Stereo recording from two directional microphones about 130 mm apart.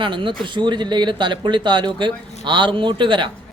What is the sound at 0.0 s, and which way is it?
A man's voice, 40° right (ahead or behind).